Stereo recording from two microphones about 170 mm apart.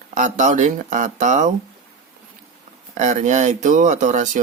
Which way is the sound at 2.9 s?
45° right (ahead or behind).